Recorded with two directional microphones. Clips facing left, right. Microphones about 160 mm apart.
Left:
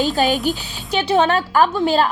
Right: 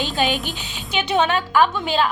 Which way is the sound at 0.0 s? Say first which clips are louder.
Left 5 dB; 40° left (ahead or behind).